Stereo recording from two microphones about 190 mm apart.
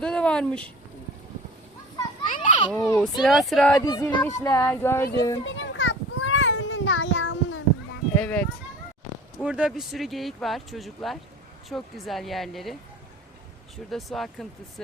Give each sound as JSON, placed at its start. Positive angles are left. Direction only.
{"t": 0.0, "sound": "speech", "side_deg": 5}
{"t": 2.2, "sound": "children playing", "side_deg": 40}
{"t": 2.5, "sound": "children playing", "side_deg": 25}
{"t": 2.7, "sound": "speech", "side_deg": 10}
{"t": 3.8, "sound": "speech", "side_deg": 20}
{"t": 5.5, "sound": "a sound", "side_deg": 75}
{"t": 8.1, "sound": "speech", "side_deg": 10}
{"t": 9.4, "sound": "speech", "side_deg": -5}
{"t": 13.9, "sound": "speech", "side_deg": 0}